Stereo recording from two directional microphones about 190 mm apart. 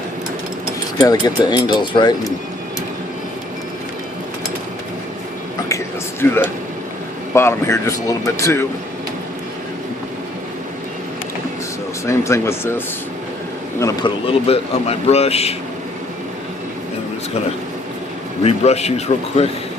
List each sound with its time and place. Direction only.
0.9 s speech: 20° left (ahead or behind)
5.6 s a sound: 15° left (ahead or behind)
7.3 s speech: 15° left (ahead or behind)
12.0 s speech: 15° left (ahead or behind)
14.3 s a man's voice: 30° left (ahead or behind)
18.4 s a man's voice: 35° left (ahead or behind)